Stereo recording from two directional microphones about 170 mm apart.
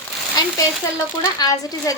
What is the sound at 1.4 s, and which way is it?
Speech, 20° left (ahead or behind).